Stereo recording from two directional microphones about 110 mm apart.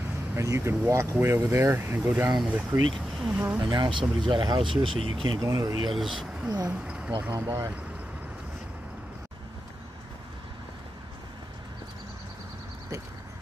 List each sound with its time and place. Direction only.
0.3 s speech: 25° right (ahead or behind)
2.9 s speech: centre (ahead or behind)
3.6 s speech: 45° right (ahead or behind)
5.4 s speech: 30° right (ahead or behind)
5.9 s speech: centre (ahead or behind)
7.3 s speech: 25° right (ahead or behind)